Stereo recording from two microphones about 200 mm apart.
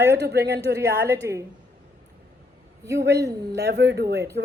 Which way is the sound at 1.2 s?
15° right (ahead or behind).